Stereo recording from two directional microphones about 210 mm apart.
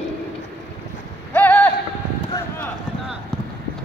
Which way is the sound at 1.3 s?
5° left (ahead or behind).